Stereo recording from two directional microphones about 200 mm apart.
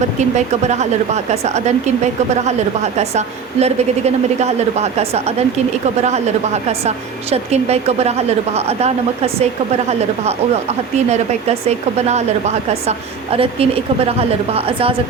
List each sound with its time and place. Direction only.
0.2 s speech: 35° right (ahead or behind)
3.0 s speech: 35° right (ahead or behind)